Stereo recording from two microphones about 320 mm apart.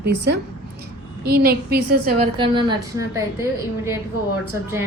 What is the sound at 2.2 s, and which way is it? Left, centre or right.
A woman's voice, centre.